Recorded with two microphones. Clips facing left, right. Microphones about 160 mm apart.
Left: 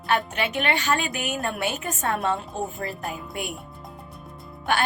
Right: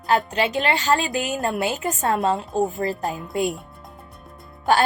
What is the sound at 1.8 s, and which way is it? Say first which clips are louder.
Speech: right 4 dB; 20° right (ahead or behind).